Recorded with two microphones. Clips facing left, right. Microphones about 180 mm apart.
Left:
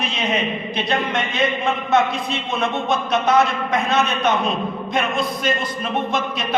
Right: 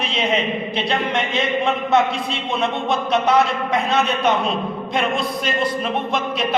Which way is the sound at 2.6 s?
30° right (ahead or behind).